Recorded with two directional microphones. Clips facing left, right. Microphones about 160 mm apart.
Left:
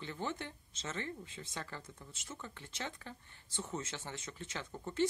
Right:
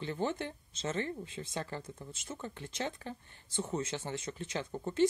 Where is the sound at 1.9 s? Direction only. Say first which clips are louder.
Right 6 dB; 35° right (ahead or behind).